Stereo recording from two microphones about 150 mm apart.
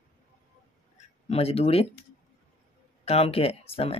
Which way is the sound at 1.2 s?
40° left (ahead or behind).